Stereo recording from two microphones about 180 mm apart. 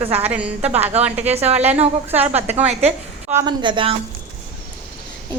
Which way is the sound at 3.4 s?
25° right (ahead or behind).